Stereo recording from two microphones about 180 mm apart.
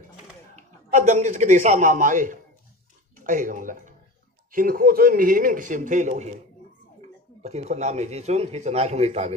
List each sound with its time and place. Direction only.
0.5 s a man's voice: 40° right (ahead or behind)